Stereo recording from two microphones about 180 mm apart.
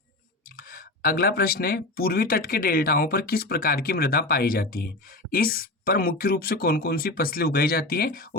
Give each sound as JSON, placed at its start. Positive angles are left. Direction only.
{"t": 0.5, "sound": "speech", "side_deg": 55}